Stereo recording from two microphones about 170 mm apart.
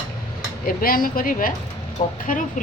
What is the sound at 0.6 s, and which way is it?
A woman's voice, 60° left (ahead or behind).